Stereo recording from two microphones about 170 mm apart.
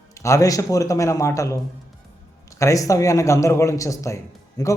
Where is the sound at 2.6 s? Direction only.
20° left (ahead or behind).